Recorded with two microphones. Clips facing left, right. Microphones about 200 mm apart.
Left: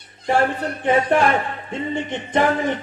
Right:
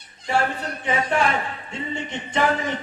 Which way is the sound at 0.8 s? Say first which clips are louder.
Left 6 dB; 50° left (ahead or behind).